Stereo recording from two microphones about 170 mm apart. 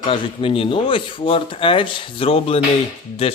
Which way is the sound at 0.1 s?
35° left (ahead or behind).